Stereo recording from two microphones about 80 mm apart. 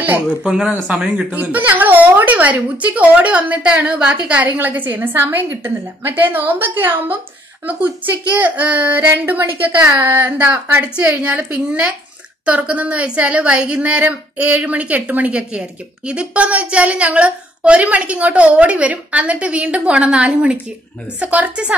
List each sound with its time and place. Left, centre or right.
0.4 s a woman's voice: centre
8.4 s a woman's voice: centre